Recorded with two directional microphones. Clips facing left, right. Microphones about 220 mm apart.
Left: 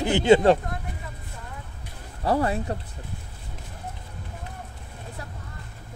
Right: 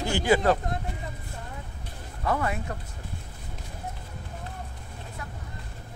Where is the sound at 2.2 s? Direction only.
35° left (ahead or behind).